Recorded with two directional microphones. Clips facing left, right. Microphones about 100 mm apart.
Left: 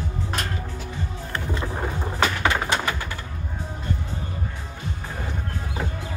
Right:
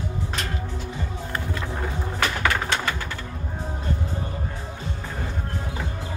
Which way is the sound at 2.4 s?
15° left (ahead or behind).